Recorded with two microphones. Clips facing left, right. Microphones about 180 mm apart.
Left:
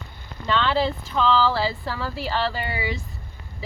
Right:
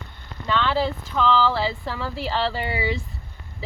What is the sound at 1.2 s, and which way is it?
Speech, 15° right (ahead or behind).